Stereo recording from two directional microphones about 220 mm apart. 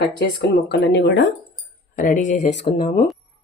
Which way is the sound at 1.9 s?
35° left (ahead or behind).